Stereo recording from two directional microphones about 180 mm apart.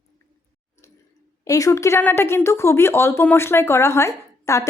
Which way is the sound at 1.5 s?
20° left (ahead or behind).